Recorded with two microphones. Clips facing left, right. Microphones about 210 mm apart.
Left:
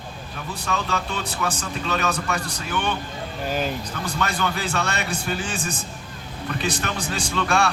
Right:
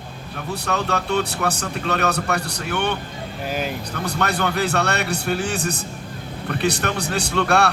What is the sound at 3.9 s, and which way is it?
Speech, 65° right (ahead or behind).